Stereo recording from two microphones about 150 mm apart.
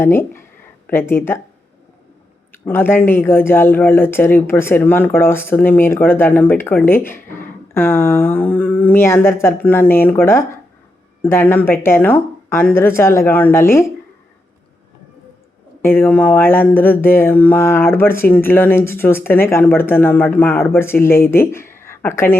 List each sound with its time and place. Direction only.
0.0 s speech: 15° left (ahead or behind)
2.5 s speech: 15° left (ahead or behind)
15.8 s speech: 15° left (ahead or behind)